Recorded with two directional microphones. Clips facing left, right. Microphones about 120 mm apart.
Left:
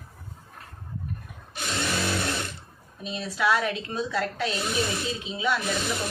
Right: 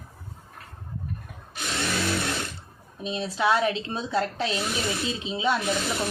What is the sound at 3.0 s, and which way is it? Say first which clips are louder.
Speech: right 1 dB; 25° right (ahead or behind).